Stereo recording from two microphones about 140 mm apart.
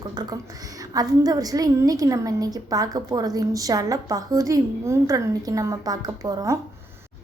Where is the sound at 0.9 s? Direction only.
25° right (ahead or behind).